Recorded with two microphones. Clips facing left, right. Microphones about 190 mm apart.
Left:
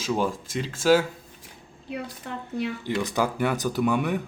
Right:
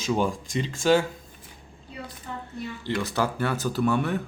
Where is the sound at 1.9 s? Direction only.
75° left (ahead or behind).